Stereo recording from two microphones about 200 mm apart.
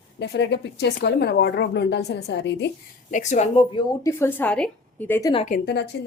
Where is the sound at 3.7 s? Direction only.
15° left (ahead or behind).